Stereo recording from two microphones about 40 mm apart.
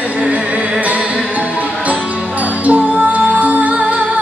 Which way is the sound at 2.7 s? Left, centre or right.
Right.